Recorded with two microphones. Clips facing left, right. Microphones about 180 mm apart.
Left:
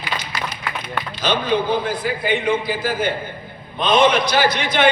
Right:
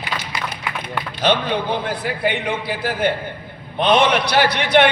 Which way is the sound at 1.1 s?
60° right (ahead or behind).